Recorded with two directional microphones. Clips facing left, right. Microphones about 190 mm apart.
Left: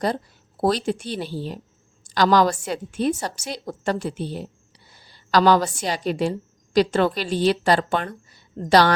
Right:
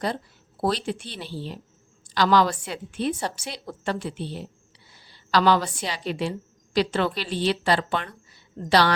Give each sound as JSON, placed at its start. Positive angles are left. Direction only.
{"t": 0.0, "sound": "a woman's voice", "side_deg": 40}